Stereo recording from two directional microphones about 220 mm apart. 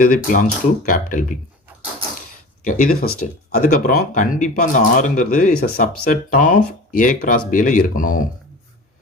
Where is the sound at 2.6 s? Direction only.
40° left (ahead or behind).